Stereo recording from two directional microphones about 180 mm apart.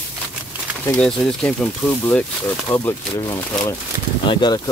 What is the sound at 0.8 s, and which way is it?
Speech, 5° left (ahead or behind).